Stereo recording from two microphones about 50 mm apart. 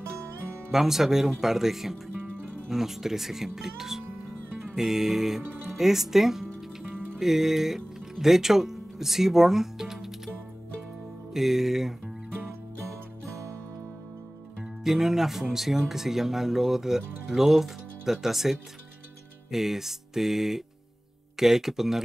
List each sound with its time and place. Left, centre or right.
0.7 s speech: centre
11.3 s speech: centre
12.8 s music: right
14.8 s speech: centre